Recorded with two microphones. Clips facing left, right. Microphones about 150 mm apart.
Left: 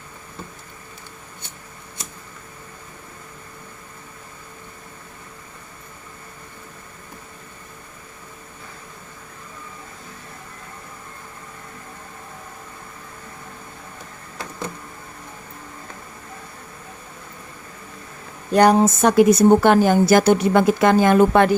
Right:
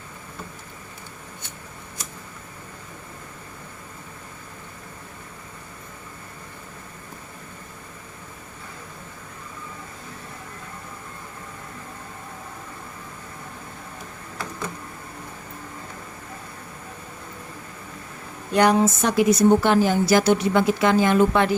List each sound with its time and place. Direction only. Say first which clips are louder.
18.5 s speech: left 4 dB; 40° left (ahead or behind)